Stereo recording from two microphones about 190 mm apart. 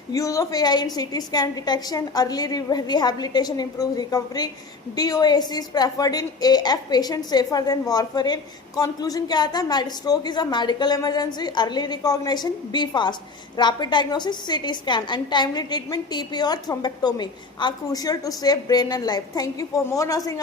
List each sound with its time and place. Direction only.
0.1 s a woman's voice: 15° left (ahead or behind)